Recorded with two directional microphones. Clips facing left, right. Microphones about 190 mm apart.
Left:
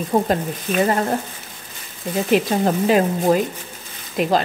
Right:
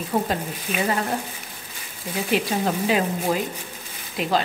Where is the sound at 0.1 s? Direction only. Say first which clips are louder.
Left 5 dB; 45° left (ahead or behind).